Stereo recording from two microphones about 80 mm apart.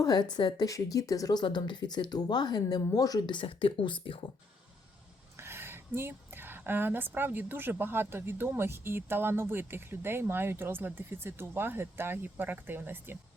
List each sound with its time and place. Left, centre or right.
0.0 s a woman's voice: left
5.4 s a woman's voice: right